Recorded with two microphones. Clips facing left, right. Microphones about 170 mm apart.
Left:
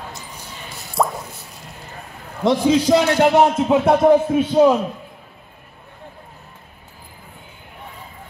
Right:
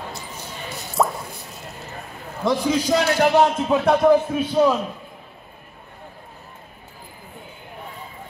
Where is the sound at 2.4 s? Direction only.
20° left (ahead or behind).